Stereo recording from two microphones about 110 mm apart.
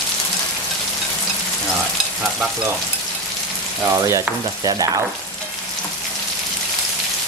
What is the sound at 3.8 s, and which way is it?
Stir, 25° right (ahead or behind).